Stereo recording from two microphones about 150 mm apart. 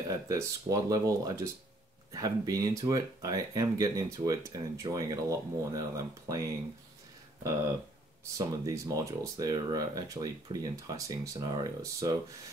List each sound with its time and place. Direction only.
0.1 s speech: 20° right (ahead or behind)
8.4 s speech: 20° right (ahead or behind)